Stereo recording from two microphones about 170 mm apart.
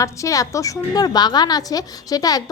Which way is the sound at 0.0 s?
20° left (ahead or behind).